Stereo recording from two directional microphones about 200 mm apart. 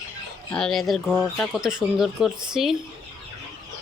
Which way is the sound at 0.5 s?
Centre (ahead or behind).